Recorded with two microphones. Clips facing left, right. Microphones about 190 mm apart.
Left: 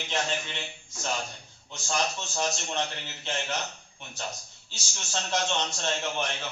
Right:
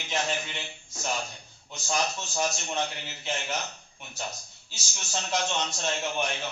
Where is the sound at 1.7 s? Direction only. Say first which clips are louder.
Even; 10° right (ahead or behind).